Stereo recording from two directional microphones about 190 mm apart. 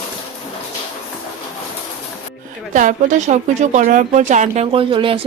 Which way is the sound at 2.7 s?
40° right (ahead or behind).